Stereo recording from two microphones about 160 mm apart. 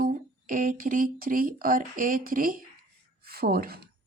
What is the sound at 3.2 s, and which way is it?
Speech, 75° right (ahead or behind).